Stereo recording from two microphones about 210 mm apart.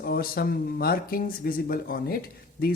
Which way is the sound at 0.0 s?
45° left (ahead or behind).